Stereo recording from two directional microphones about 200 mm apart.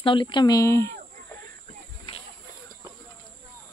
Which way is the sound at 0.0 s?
25° left (ahead or behind).